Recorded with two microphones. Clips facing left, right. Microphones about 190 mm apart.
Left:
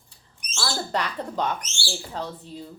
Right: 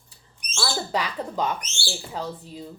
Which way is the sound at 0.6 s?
5° right (ahead or behind).